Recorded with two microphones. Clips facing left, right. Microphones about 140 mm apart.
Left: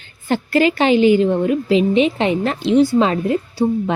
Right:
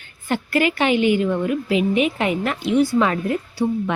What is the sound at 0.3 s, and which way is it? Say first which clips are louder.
A woman's voice: left 4 dB; 30° left (ahead or behind).